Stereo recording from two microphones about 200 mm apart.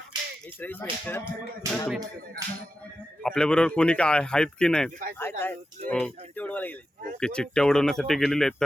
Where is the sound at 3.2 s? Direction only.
5° left (ahead or behind).